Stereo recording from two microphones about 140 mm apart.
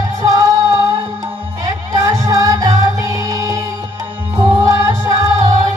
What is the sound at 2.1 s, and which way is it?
Music, 25° right (ahead or behind).